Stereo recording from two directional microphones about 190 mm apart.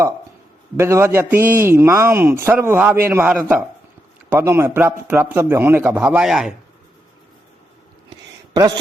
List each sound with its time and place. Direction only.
0.8 s a man's voice: 15° right (ahead or behind)
8.5 s a man's voice: 20° right (ahead or behind)